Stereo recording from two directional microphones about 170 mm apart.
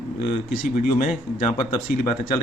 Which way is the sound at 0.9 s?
50° left (ahead or behind).